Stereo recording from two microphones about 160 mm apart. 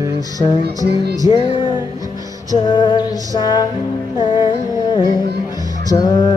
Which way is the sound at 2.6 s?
30° left (ahead or behind).